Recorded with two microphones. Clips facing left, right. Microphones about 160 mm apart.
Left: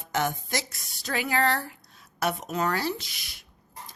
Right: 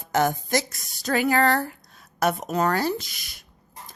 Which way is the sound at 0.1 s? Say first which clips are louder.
Right 6 dB; 40° right (ahead or behind).